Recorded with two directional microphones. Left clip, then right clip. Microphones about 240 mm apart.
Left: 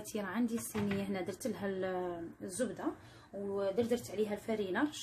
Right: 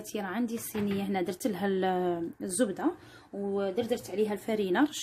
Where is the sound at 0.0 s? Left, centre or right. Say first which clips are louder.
Right 4 dB; right.